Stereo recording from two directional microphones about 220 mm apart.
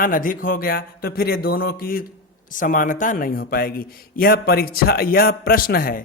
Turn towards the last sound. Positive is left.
turn(degrees=40)  # may be behind; listen again after turning